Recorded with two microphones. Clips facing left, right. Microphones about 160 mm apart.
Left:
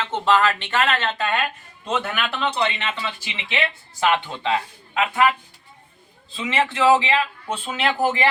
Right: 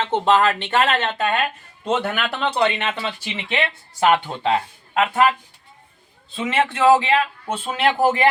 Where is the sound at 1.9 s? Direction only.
40° right (ahead or behind).